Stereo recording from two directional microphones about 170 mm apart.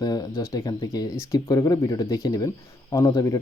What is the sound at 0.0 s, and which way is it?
Speech, 20° left (ahead or behind).